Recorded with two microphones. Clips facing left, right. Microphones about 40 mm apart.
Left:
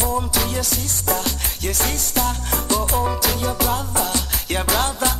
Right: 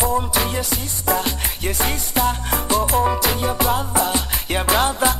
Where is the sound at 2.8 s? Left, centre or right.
Centre.